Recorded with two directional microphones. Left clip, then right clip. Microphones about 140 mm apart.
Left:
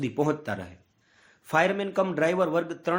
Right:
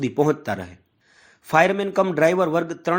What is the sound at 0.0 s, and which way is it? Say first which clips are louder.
Speech: right 6 dB; 35° right (ahead or behind).